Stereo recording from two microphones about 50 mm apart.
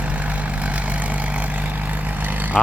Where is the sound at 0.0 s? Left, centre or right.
Right.